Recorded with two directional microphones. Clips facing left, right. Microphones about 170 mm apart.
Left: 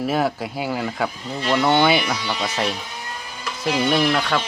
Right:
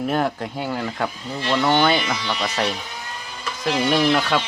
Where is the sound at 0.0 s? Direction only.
5° left (ahead or behind).